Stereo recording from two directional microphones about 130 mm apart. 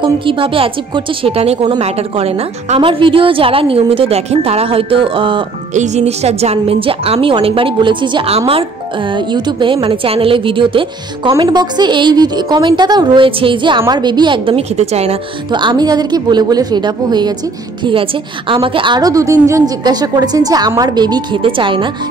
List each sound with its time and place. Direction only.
0.0 s a woman's voice: 40° right (ahead or behind)
5.8 s a woman's voice: 55° right (ahead or behind)
9.1 s a woman's voice: 35° right (ahead or behind); by 15.1 s 55° right (ahead or behind)
15.5 s a woman's voice: 35° right (ahead or behind)
18.5 s a woman's voice: 40° right (ahead or behind)